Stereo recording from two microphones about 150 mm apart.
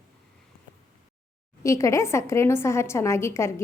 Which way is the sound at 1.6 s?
20° left (ahead or behind).